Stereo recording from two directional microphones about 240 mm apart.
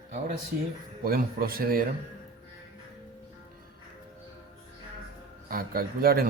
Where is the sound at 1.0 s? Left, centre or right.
Right.